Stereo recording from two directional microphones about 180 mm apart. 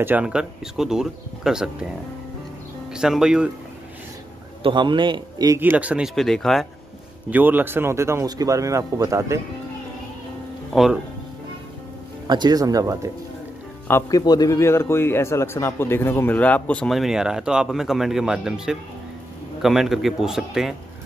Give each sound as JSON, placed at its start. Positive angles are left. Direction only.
{"t": 0.0, "sound": "speech", "side_deg": -10}
{"t": 2.9, "sound": "speech", "side_deg": -5}
{"t": 4.6, "sound": "a man's voice", "side_deg": -25}
{"t": 5.6, "sound": "speech", "side_deg": -10}
{"t": 7.2, "sound": "speech", "side_deg": -10}
{"t": 10.7, "sound": "speech", "side_deg": 0}
{"t": 12.3, "sound": "a man's voice", "side_deg": -25}
{"t": 13.8, "sound": "a man's voice", "side_deg": 15}